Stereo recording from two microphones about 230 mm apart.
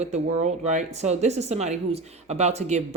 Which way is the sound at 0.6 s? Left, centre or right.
Right.